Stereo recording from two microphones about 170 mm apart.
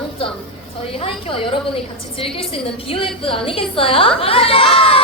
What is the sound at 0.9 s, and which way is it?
A woman's voice, 35° left (ahead or behind).